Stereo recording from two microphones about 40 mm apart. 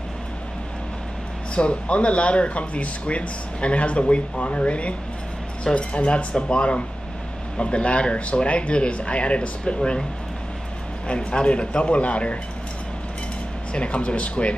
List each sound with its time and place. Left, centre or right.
1.5 s speech: left
11.1 s speech: left
13.7 s speech: left